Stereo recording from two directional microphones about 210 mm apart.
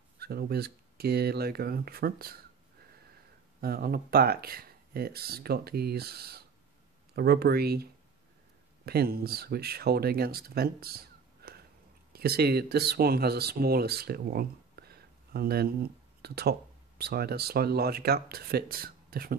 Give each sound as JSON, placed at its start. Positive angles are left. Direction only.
{"t": 0.2, "sound": "speech", "side_deg": -50}
{"t": 3.6, "sound": "speech", "side_deg": -45}
{"t": 12.1, "sound": "speech", "side_deg": -50}